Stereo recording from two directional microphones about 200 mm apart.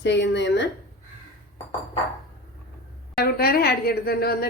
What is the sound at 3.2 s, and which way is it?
A woman's voice, 50° left (ahead or behind).